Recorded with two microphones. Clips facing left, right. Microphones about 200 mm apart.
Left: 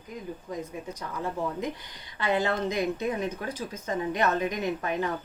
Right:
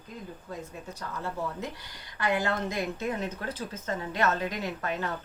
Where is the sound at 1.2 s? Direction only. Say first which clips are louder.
Left 4 dB; 15° left (ahead or behind).